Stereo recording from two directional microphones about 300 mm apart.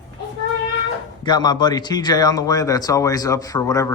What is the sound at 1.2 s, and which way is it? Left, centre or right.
Speech, centre.